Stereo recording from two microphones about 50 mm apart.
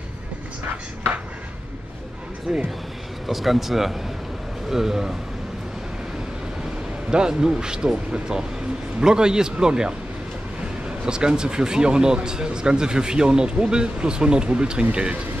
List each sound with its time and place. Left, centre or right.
2.5 s speech: centre
7.1 s speech: centre